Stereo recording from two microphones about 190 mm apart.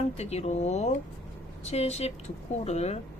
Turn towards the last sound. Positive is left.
turn(degrees=35)  # may be behind; listen again after turning